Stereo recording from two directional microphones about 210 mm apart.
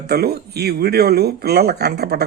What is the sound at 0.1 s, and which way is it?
Speech, 50° right (ahead or behind).